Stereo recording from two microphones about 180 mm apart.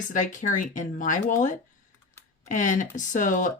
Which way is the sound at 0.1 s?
45° left (ahead or behind).